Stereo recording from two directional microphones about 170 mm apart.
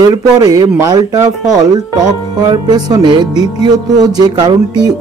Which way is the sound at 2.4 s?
25° right (ahead or behind).